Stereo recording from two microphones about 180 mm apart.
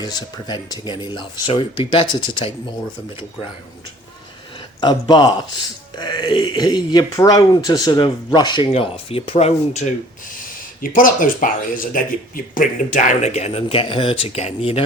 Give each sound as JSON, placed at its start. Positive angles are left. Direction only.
{"t": 0.0, "sound": "speech", "side_deg": 25}
{"t": 4.8, "sound": "speech", "side_deg": 25}